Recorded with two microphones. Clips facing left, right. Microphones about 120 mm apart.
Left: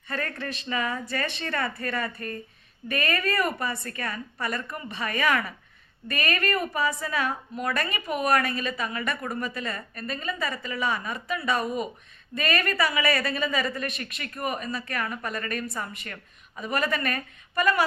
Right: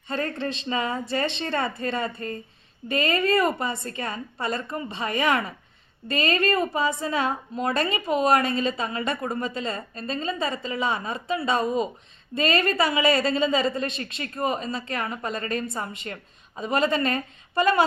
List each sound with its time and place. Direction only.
0.1 s a woman's voice: 25° right (ahead or behind)